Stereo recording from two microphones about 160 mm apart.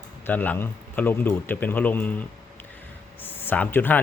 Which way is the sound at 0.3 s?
10° left (ahead or behind).